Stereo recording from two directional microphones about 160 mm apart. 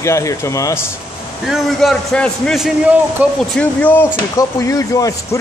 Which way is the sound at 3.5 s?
10° left (ahead or behind).